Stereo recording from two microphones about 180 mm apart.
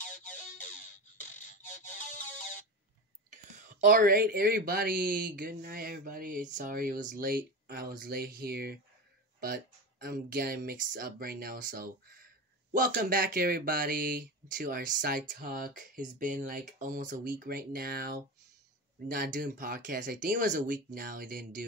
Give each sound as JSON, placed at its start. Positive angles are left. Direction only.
{"t": 0.0, "sound": "music", "side_deg": 45}
{"t": 3.6, "sound": "speech", "side_deg": -45}